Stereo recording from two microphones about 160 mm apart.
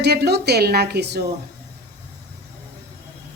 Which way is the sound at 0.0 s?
90° right.